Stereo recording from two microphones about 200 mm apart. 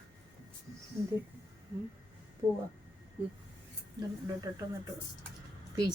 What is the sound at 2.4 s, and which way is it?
Speech, 15° right (ahead or behind).